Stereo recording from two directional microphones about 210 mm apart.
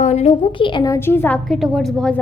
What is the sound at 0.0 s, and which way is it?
A woman's voice, 30° left (ahead or behind).